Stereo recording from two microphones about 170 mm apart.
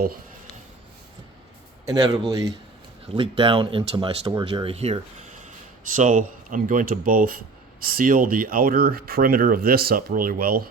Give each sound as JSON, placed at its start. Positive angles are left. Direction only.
{"t": 1.9, "sound": "speech", "side_deg": -20}
{"t": 6.0, "sound": "speech", "side_deg": -50}